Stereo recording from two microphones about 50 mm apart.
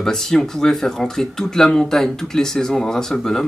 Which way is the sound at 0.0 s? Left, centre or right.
Centre.